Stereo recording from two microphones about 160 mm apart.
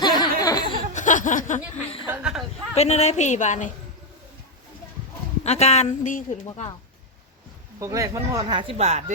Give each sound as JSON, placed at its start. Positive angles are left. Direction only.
{"t": 0.0, "sound": "a sound", "side_deg": 25}
{"t": 0.9, "sound": "a sound", "side_deg": 50}
{"t": 2.0, "sound": "speech", "side_deg": -5}
{"t": 2.7, "sound": "a woman's voice", "side_deg": 40}
{"t": 5.4, "sound": "a woman's voice", "side_deg": 40}
{"t": 7.8, "sound": "speech", "side_deg": -20}
{"t": 8.8, "sound": "speech", "side_deg": -45}